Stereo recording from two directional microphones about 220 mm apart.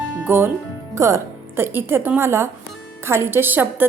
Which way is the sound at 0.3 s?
10° right (ahead or behind).